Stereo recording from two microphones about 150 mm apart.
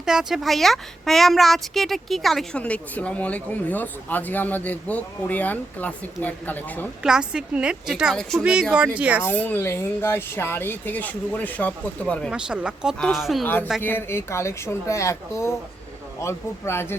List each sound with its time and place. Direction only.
0.0 s speech: 5° right (ahead or behind); by 6.8 s 10° left (ahead or behind)
7.0 s a woman's voice: 5° right (ahead or behind)
9.2 s speech: 15° left (ahead or behind)
12.3 s a woman's voice: 5° right (ahead or behind)
13.8 s speech: 15° left (ahead or behind)